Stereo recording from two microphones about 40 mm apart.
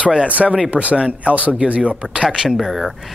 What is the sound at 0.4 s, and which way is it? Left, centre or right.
Speech, centre.